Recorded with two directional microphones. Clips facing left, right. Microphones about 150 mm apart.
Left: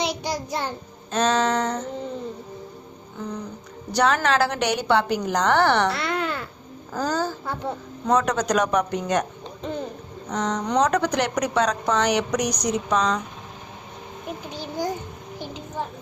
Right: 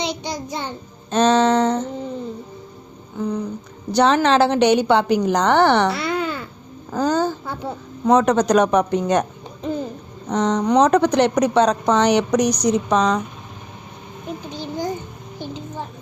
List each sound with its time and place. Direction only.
0.0 s child singing: 5° left (ahead or behind)
1.1 s a woman's voice: 30° right (ahead or behind)
3.9 s a woman's voice: 25° right (ahead or behind)
5.9 s babbling: centre (ahead or behind)
6.9 s a woman's voice: 20° right (ahead or behind)
7.4 s a woman's voice: centre (ahead or behind)
8.0 s a woman's voice: 25° right (ahead or behind)
9.6 s hoot: 5° right (ahead or behind)
10.2 s a woman's voice: 25° right (ahead or behind)
14.5 s a child's voice: 10° left (ahead or behind)